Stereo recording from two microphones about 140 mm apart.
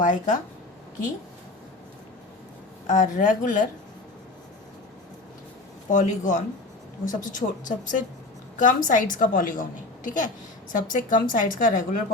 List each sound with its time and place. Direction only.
0.0 s speech: 65° left (ahead or behind)
2.8 s a woman's voice: 65° left (ahead or behind)
5.9 s a woman's voice: 65° left (ahead or behind)